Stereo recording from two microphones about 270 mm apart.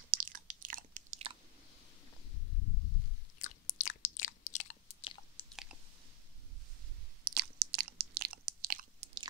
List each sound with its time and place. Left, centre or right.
0.1 s chewing: right
3.3 s chewing: left
5.4 s chewing: centre
7.2 s chewing: right